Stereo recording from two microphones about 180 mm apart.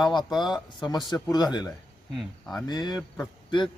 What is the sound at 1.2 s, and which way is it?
Speech, 20° left (ahead or behind).